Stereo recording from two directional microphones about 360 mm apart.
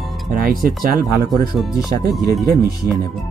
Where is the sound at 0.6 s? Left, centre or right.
Right.